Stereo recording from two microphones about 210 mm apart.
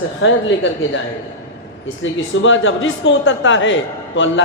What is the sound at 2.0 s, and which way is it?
A man's voice, 65° left (ahead or behind).